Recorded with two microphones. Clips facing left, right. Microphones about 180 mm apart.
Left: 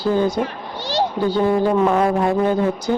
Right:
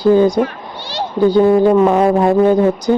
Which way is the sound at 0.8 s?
45° left (ahead or behind).